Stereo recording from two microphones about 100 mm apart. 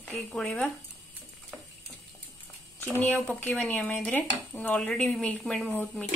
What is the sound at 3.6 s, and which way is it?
Dishes, 15° left (ahead or behind).